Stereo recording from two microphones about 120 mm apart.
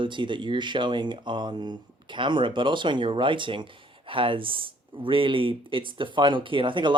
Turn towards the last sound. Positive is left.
turn(degrees=-45)  # may be behind; listen again after turning